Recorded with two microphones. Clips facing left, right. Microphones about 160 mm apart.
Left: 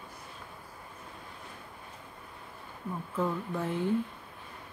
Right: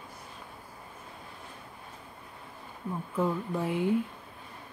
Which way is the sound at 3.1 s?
10° right (ahead or behind).